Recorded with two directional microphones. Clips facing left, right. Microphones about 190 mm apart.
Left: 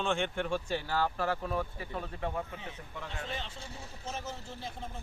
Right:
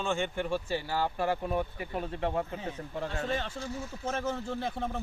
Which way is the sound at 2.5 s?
40° right (ahead or behind).